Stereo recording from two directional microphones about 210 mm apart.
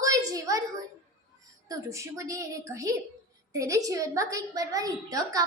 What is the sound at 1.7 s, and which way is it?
A woman's voice, 15° right (ahead or behind).